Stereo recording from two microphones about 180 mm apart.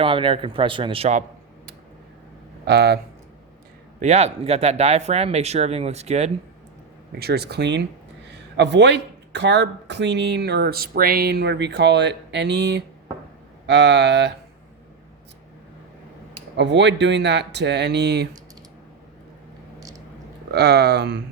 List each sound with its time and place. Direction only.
0.0 s speech: 30° right (ahead or behind)
2.6 s speech: 65° right (ahead or behind)
4.0 s speech: 35° right (ahead or behind)
7.2 s speech: 65° right (ahead or behind)
16.6 s speech: 75° right (ahead or behind)
20.5 s speech: 65° right (ahead or behind)